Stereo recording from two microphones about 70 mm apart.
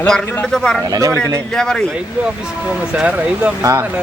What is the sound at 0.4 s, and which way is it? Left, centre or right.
Speech, centre.